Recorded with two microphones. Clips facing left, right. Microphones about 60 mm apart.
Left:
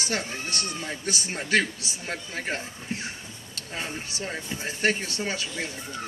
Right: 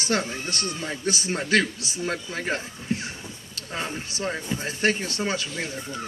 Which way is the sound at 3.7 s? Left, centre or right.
Centre.